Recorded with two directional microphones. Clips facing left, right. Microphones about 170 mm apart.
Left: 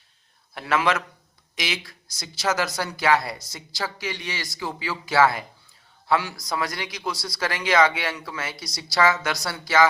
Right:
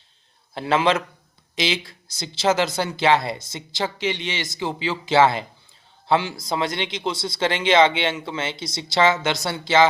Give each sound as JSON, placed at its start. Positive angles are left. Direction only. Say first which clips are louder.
{"t": 0.5, "sound": "speech", "louder": "right 3 dB", "side_deg": -30}